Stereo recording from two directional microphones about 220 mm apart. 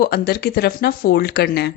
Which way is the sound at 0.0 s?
45° left (ahead or behind).